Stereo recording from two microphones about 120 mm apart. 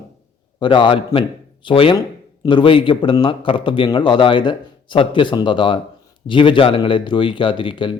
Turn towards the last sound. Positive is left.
turn(degrees=45)  # may be behind; listen again after turning